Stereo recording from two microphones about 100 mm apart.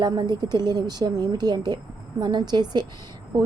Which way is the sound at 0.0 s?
45° right (ahead or behind).